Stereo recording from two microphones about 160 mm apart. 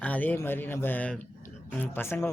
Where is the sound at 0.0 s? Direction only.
10° left (ahead or behind).